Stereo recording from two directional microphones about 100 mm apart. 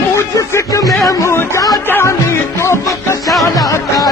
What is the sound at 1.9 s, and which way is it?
Music, 25° left (ahead or behind).